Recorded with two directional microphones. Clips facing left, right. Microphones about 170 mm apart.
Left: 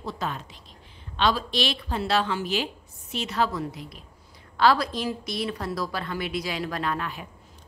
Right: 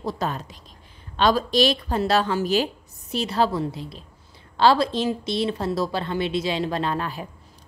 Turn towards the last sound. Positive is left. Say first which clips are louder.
# right 3 dB
turn(degrees=-35)  # may be behind; listen again after turning